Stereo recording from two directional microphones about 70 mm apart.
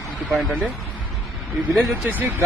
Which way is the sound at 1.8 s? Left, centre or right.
Right.